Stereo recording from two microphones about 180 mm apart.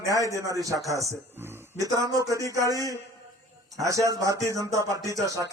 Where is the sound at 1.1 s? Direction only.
10° right (ahead or behind).